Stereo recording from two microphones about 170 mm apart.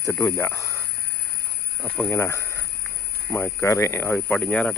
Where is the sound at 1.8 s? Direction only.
10° left (ahead or behind).